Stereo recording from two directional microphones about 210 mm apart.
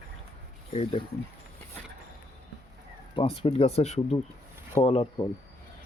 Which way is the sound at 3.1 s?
25° left (ahead or behind).